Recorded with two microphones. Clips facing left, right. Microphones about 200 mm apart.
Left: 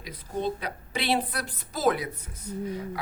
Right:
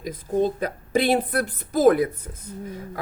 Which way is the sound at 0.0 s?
45° right (ahead or behind).